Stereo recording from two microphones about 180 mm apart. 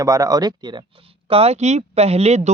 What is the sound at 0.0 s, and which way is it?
Speech, 20° right (ahead or behind).